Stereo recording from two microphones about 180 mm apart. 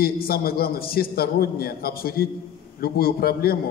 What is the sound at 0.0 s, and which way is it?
Speech, 55° left (ahead or behind).